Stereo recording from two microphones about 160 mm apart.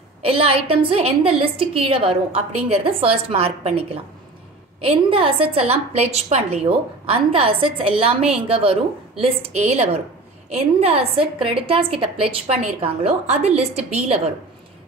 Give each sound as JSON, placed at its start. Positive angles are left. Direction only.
{"t": 0.2, "sound": "a woman's voice", "side_deg": -35}